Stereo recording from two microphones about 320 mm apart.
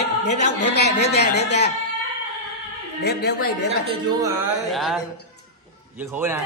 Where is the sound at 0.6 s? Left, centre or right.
Left.